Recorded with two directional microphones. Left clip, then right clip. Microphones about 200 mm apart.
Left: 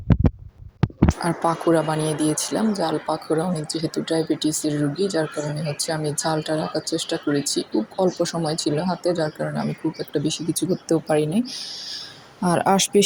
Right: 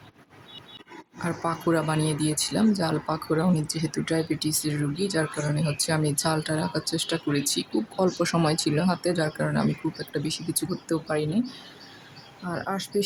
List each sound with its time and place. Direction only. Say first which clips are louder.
1.2 s speech: left 3 dB; 15° left (ahead or behind)
12.5 s speech: left 12 dB; 30° left (ahead or behind)